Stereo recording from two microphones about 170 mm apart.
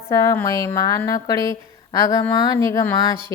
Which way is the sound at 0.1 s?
20° left (ahead or behind).